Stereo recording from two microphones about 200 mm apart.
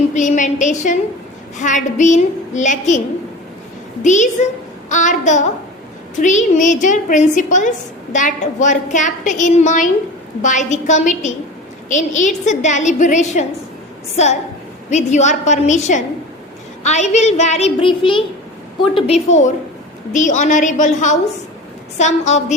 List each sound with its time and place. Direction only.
0.1 s a sound: 40° left (ahead or behind)
1.5 s a woman's voice: 40° left (ahead or behind)
4.0 s a woman's voice: 35° left (ahead or behind)
14.8 s a woman's voice: 35° left (ahead or behind)
20.1 s a woman's voice: 40° left (ahead or behind)